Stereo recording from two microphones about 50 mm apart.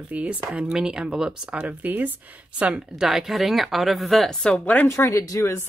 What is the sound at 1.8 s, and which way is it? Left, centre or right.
Speech, right.